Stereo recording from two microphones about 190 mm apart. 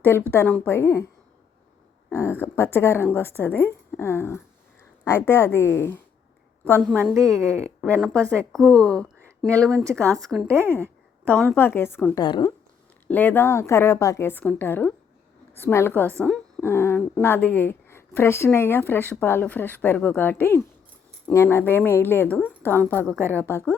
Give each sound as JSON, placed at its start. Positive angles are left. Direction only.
{"t": 0.0, "sound": "a woman's voice", "side_deg": 10}
{"t": 2.0, "sound": "speech", "side_deg": 10}
{"t": 7.0, "sound": "a woman's voice", "side_deg": -15}
{"t": 7.4, "sound": "speech", "side_deg": 5}
{"t": 10.0, "sound": "a woman's voice", "side_deg": -15}
{"t": 10.2, "sound": "speech", "side_deg": 0}
{"t": 10.5, "sound": "a woman's voice", "side_deg": -15}
{"t": 11.5, "sound": "speech", "side_deg": 10}
{"t": 12.2, "sound": "a woman's voice", "side_deg": 25}
{"t": 13.1, "sound": "speech", "side_deg": 10}
{"t": 23.1, "sound": "a woman's voice", "side_deg": -15}
{"t": 23.4, "sound": "speech", "side_deg": 10}